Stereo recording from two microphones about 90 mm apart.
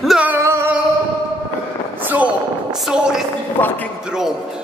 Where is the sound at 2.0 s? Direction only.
20° right (ahead or behind).